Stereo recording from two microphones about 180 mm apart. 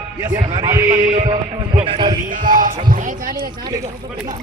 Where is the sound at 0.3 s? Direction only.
25° right (ahead or behind).